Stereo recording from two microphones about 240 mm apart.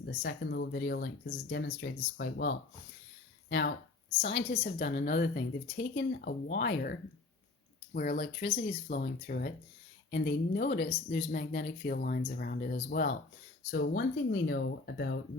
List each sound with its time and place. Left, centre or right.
0.0 s a woman's voice: left
7.9 s a woman's voice: left